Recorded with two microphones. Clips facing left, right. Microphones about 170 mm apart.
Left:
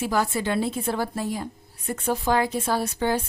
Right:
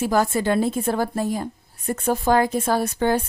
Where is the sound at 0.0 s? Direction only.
45° right (ahead or behind).